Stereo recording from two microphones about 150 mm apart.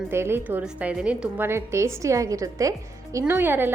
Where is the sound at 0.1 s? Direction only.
15° right (ahead or behind).